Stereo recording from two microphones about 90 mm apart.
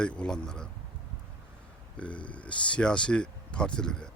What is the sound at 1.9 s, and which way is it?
Speech, 15° left (ahead or behind).